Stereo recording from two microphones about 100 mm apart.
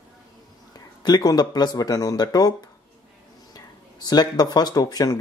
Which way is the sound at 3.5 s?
40° left (ahead or behind).